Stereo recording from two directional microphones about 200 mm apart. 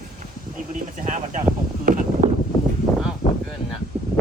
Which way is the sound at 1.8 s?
40° right (ahead or behind).